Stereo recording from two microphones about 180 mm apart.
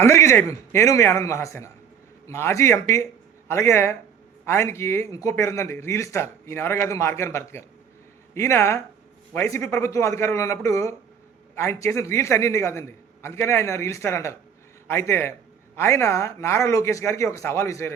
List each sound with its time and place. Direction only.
0.0 s a man's voice: 15° left (ahead or behind)